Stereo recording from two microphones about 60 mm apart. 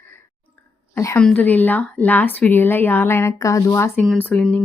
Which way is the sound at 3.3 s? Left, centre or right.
Left.